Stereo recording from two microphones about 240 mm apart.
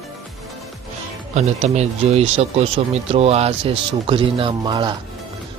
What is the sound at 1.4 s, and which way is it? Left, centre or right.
Speech, right.